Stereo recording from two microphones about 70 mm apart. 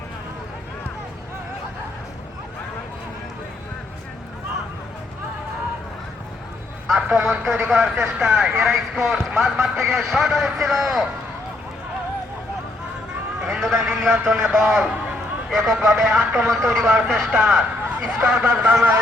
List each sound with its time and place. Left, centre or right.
6.9 s a man's voice: centre
13.5 s a man's voice: centre
16.0 s speech: centre
16.5 s speech: centre